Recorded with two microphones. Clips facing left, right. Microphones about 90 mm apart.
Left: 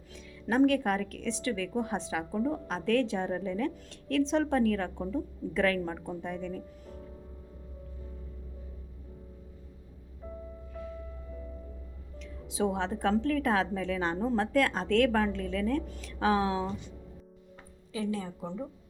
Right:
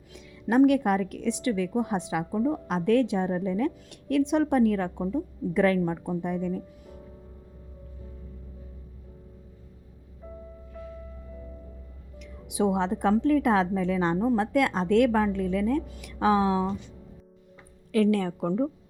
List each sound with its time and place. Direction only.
0.1 s a woman's voice: 20° right (ahead or behind)
6.8 s music: 5° right (ahead or behind)
12.2 s a woman's voice: 20° right (ahead or behind)
17.9 s a woman's voice: 65° right (ahead or behind)